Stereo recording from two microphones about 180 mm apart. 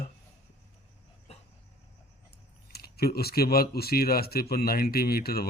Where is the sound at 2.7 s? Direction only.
60° left (ahead or behind).